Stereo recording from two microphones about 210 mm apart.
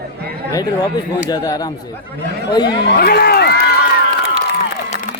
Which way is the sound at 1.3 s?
15° left (ahead or behind).